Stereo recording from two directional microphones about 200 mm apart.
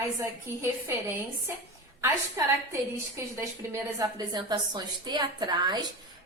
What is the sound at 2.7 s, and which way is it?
A woman's voice, 15° right (ahead or behind).